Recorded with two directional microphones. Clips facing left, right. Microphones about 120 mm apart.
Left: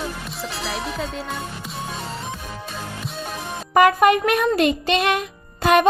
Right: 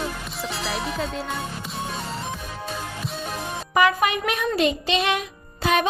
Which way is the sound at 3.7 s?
45° left (ahead or behind).